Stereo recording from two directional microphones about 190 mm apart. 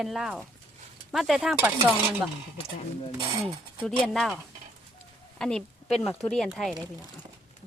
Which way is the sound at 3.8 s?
Centre (ahead or behind).